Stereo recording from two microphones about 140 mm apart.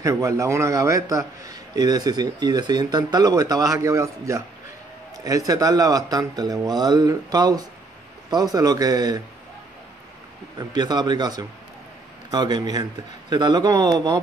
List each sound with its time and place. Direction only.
0.0 s a man's voice: 20° right (ahead or behind)
10.6 s a man's voice: 30° right (ahead or behind)